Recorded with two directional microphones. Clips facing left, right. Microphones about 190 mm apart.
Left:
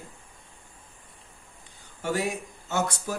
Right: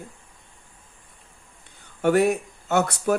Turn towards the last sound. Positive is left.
turn(degrees=-60)  # may be behind; listen again after turning